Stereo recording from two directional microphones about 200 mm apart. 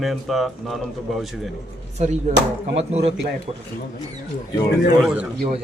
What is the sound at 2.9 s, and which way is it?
Speech, 30° right (ahead or behind).